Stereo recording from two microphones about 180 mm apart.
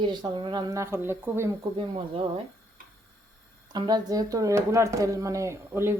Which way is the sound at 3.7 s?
20° right (ahead or behind).